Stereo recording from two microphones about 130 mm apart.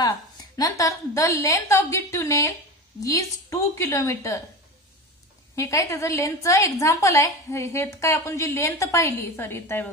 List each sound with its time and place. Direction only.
0.6 s a woman's voice: 25° left (ahead or behind)
5.6 s a woman's voice: 25° left (ahead or behind)